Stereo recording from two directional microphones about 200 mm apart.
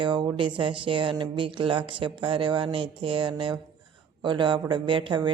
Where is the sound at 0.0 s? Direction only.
20° right (ahead or behind).